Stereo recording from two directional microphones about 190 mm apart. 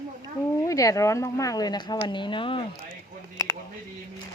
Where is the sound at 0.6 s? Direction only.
15° left (ahead or behind).